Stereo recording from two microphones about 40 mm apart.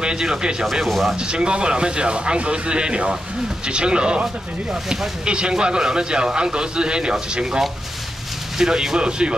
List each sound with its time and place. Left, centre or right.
0.0 s speech: centre
0.8 s speech: centre
1.1 s speech: right